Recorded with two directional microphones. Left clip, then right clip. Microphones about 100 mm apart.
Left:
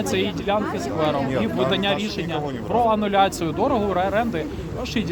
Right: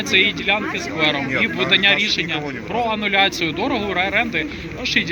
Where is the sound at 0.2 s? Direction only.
35° left (ahead or behind).